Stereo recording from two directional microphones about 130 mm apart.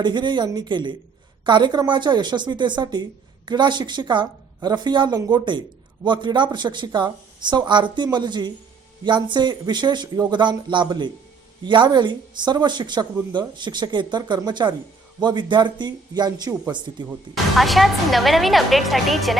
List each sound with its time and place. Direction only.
0.0 s a woman's voice: 35° right (ahead or behind)
17.3 s speech: centre (ahead or behind)